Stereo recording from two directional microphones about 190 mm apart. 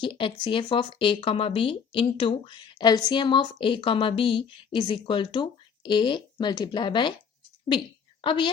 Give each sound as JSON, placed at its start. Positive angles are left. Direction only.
{"t": 0.0, "sound": "speech", "side_deg": 25}
{"t": 8.2, "sound": "a woman's voice", "side_deg": 25}